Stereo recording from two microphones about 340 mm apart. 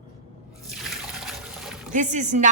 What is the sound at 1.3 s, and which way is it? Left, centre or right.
Trickle, centre.